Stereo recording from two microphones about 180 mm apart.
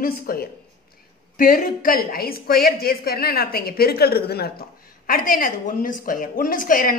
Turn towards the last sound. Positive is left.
turn(degrees=50)  # may be behind; listen again after turning